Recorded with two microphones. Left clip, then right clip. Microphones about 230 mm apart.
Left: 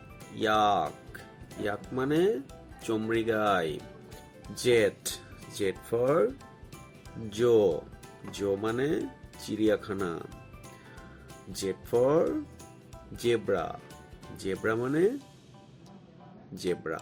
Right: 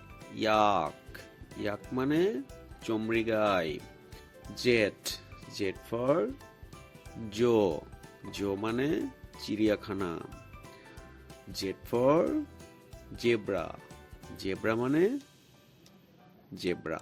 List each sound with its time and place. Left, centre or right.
0.3 s speech: right
7.3 s speech: right
11.9 s speech: right
16.6 s speech: right